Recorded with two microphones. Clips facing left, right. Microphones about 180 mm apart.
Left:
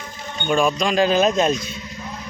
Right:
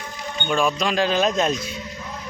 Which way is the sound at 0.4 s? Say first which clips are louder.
Left 3 dB; centre (ahead or behind).